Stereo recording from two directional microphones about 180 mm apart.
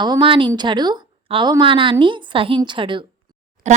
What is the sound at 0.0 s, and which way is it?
Speech, 25° right (ahead or behind).